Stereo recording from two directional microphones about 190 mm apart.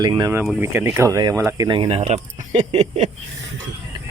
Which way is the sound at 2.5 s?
35° right (ahead or behind).